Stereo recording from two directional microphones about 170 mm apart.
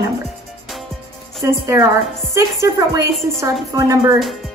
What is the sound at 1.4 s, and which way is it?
A woman's voice, 15° right (ahead or behind).